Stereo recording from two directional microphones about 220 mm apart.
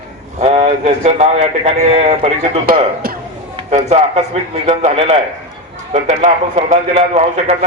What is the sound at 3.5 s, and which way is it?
A man's voice, 30° right (ahead or behind).